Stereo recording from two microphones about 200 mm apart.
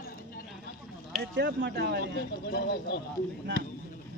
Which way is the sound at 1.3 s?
60° right (ahead or behind).